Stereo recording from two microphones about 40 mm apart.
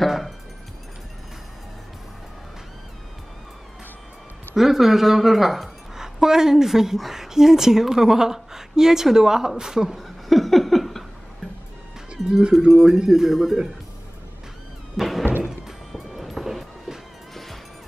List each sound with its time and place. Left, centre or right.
4.6 s a woman's voice: centre
9.9 s laughter: centre
12.3 s a woman's voice: centre
12.5 s a woman's voice: centre
15.0 s music: centre